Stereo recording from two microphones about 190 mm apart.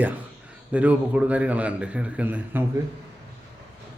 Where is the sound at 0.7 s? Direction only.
5° right (ahead or behind).